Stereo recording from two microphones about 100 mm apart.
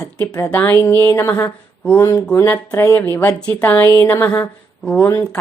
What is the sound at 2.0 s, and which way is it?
A woman's voice, 20° left (ahead or behind).